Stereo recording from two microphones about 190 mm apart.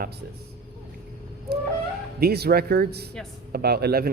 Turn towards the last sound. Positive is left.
turn(degrees=-55)  # may be behind; listen again after turning